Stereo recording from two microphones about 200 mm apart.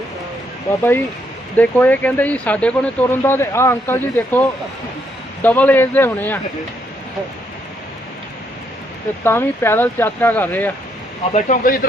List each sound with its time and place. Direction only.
0.7 s speech: 15° left (ahead or behind)
9.2 s speech: 10° left (ahead or behind)
11.3 s speech: 40° left (ahead or behind)